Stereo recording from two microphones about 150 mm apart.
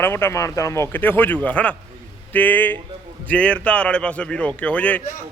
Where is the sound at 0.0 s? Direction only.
15° left (ahead or behind).